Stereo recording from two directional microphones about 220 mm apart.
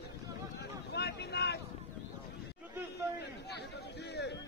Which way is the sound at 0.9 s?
50° left (ahead or behind).